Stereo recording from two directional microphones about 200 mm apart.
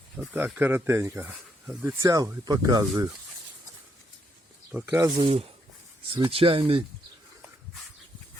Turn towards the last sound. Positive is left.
turn(degrees=-25)  # may be behind; listen again after turning